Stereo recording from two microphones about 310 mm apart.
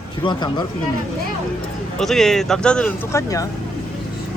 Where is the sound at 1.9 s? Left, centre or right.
Centre.